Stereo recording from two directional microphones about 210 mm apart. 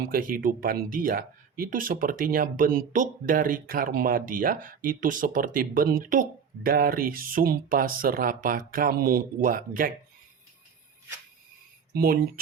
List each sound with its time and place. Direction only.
0.0 s speech: 40° right (ahead or behind)
11.9 s speech: 45° right (ahead or behind)